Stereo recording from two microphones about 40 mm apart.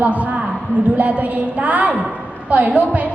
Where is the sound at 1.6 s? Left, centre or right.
Right.